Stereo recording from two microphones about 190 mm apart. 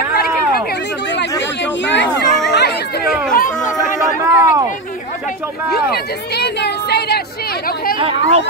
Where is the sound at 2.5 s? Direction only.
60° left (ahead or behind).